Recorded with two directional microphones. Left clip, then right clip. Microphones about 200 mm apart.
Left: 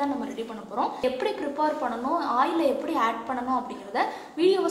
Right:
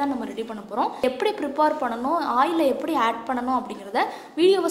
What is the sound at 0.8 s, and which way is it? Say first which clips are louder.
A woman's voice: right 3 dB; 50° right (ahead or behind).